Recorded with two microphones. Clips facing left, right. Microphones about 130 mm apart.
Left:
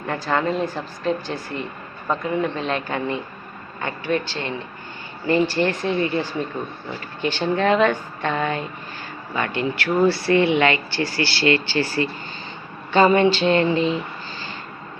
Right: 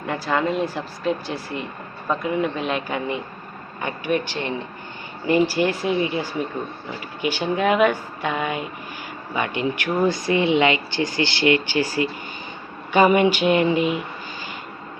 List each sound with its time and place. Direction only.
0.1 s speech: 10° right (ahead or behind)